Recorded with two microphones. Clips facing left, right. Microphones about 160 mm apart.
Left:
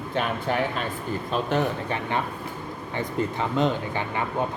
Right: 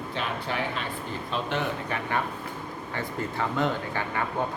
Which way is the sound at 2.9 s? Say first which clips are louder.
Left 4 dB; 20° left (ahead or behind).